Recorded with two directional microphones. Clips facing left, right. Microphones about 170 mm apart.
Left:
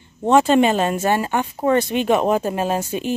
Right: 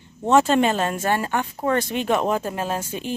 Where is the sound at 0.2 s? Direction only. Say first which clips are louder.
Left 3 dB; 15° left (ahead or behind).